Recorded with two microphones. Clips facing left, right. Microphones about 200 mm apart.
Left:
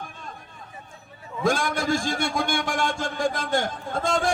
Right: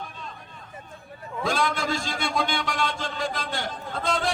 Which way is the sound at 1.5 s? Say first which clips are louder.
Left 3 dB; 50° left (ahead or behind).